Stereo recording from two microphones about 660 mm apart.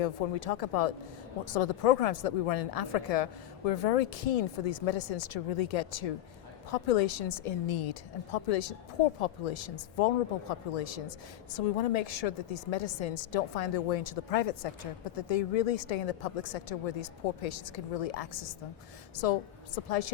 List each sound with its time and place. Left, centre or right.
0.0 s a woman's voice: left